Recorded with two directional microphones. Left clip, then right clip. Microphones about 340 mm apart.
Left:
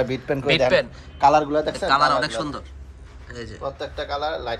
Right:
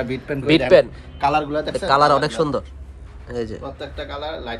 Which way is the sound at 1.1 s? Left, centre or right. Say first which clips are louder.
Left 3 dB; centre.